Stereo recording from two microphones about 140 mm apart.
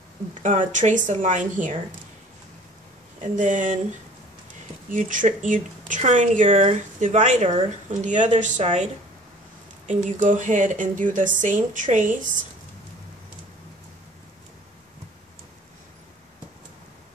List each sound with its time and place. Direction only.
0.3 s speech: 60° right (ahead or behind)
3.2 s speech: 65° right (ahead or behind)
4.9 s speech: 65° right (ahead or behind)
10.0 s speech: 65° right (ahead or behind)